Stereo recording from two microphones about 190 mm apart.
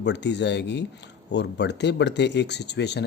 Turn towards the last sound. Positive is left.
turn(degrees=65)  # may be behind; listen again after turning